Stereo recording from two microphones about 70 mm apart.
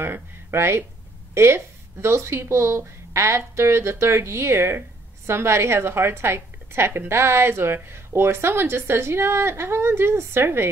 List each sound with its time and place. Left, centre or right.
0.0 s speech: right